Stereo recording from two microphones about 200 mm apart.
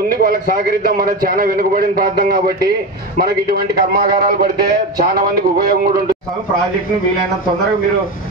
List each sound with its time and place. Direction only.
0.1 s a man's voice: 45° right (ahead or behind)